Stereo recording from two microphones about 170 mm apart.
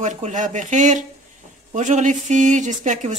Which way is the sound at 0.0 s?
45° right (ahead or behind).